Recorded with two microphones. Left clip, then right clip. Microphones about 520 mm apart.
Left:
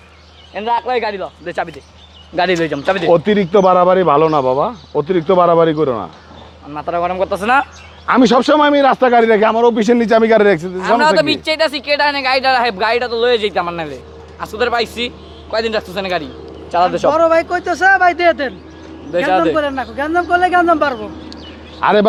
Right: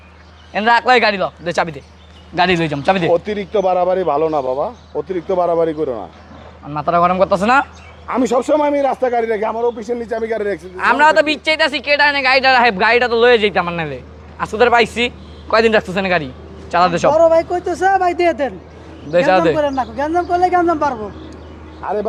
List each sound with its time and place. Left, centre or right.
0.5 s speech: right
2.3 s speech: centre
3.1 s a man's voice: left
6.7 s speech: centre
8.0 s a man's voice: left
10.8 s speech: right
17.2 s speech: left; by 18.5 s centre
19.3 s speech: centre
19.5 s speech: centre; by 20.9 s left
21.8 s speech: left